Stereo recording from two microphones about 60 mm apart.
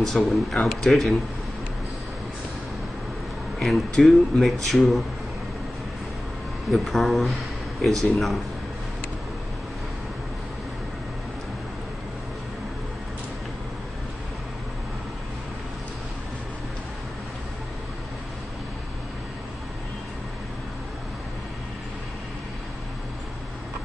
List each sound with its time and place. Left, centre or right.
0.0 s speech: centre
3.6 s speech: centre
6.7 s speech: centre